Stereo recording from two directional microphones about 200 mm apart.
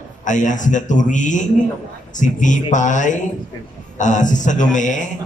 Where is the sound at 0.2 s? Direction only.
40° left (ahead or behind).